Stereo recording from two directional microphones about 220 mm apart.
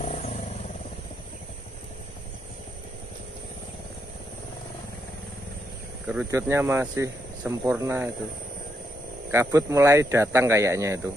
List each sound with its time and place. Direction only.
0.0 s vehicle: 30° left (ahead or behind)
6.0 s speech: 10° right (ahead or behind)
9.3 s speech: 15° right (ahead or behind)